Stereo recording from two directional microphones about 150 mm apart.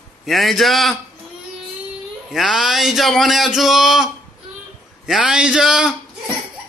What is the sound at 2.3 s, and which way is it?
A man's voice, centre (ahead or behind).